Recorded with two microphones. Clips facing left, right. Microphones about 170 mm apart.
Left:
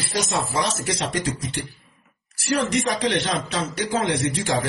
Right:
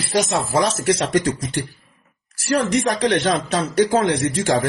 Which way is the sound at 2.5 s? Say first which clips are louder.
Right 3 dB; 45° right (ahead or behind).